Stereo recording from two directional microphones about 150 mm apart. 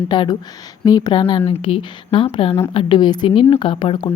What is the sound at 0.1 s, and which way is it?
Speech, 30° left (ahead or behind).